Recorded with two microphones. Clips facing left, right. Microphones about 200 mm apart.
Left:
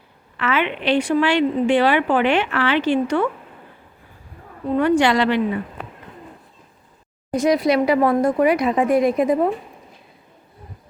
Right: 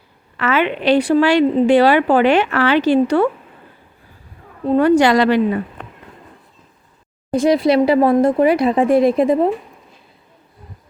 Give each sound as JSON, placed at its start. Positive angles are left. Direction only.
{"t": 0.3, "sound": "a woman's voice", "side_deg": -40}
{"t": 4.6, "sound": "a woman's voice", "side_deg": -35}
{"t": 7.3, "sound": "speech", "side_deg": -30}